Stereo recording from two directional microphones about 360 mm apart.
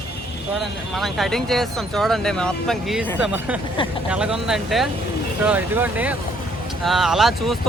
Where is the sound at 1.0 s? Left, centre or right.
Centre.